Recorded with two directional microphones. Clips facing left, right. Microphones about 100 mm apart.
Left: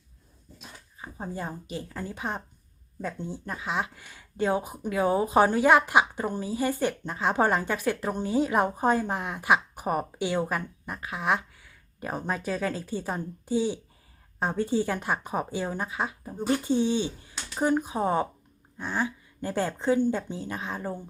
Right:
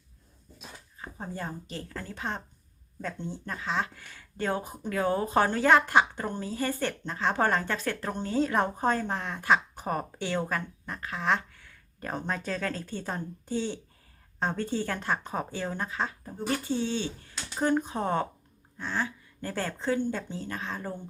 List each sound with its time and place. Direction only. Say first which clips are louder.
0.9 s speech: left 2 dB; 10° left (ahead or behind)